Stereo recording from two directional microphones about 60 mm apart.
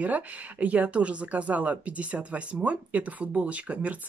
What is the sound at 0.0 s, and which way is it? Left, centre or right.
Speech, right.